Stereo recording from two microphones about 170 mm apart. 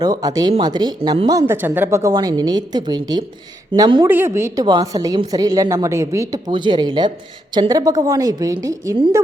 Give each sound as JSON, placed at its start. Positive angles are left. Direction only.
{"t": 0.0, "sound": "a woman's voice", "side_deg": -20}
{"t": 4.1, "sound": "a woman's voice", "side_deg": -15}